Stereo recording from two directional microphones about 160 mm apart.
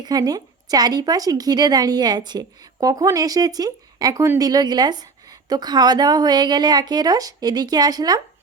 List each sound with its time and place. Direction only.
0.0 s a woman's voice: 25° right (ahead or behind)